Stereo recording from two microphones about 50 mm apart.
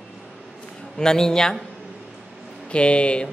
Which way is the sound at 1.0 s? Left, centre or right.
Centre.